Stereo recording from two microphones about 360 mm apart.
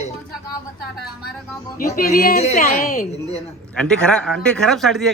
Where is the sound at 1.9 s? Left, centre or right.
Left.